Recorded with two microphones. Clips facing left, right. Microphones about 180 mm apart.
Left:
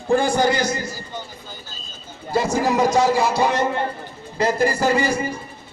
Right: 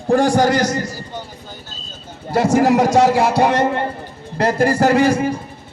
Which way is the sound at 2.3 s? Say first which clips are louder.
Right 5 dB; 75° right (ahead or behind).